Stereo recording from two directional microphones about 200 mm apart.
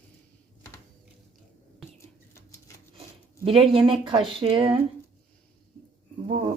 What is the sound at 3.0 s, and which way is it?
Speech, 25° right (ahead or behind).